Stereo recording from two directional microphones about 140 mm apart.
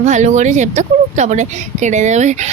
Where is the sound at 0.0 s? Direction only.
55° right (ahead or behind).